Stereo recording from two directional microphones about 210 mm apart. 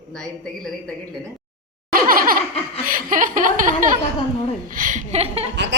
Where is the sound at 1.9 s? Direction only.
45° right (ahead or behind).